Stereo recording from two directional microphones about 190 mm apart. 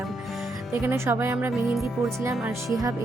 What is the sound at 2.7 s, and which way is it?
Speech, 15° right (ahead or behind).